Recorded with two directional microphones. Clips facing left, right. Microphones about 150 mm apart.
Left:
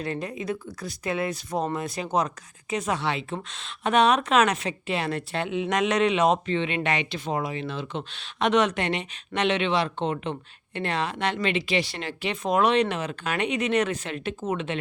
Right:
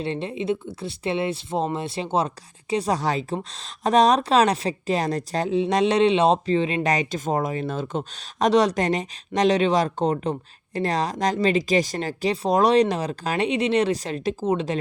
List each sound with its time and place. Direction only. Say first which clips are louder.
0.0 s speech: right 4 dB; 30° right (ahead or behind)